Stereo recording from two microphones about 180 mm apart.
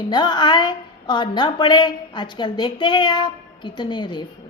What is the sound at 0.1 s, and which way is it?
A woman's voice, 25° left (ahead or behind).